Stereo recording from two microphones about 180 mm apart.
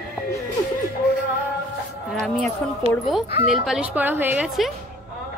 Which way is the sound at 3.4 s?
Centre (ahead or behind).